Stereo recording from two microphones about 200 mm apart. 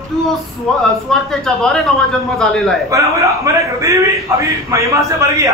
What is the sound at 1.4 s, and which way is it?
A man's voice, 5° left (ahead or behind).